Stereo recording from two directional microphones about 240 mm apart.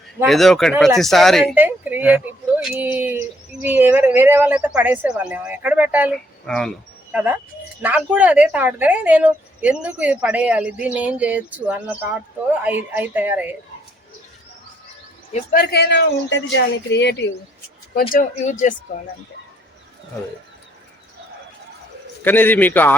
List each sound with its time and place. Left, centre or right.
0.2 s speech: centre
15.3 s speech: left
15.7 s speech: left
18.1 s speech: left
22.2 s a man's voice: centre